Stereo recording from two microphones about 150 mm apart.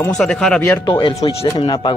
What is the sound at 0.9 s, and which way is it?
Speech, 35° left (ahead or behind).